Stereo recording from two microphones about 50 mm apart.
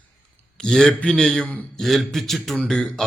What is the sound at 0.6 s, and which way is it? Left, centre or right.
Speech, centre.